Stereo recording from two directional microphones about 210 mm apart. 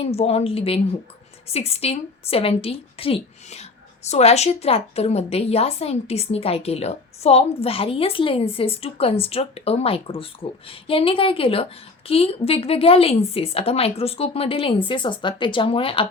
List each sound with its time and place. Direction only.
0.0 s a woman's voice: 30° left (ahead or behind)